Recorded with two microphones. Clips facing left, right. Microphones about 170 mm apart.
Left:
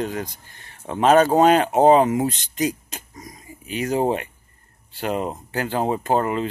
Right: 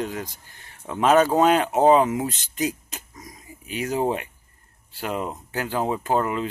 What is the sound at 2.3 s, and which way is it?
Speech, 5° right (ahead or behind).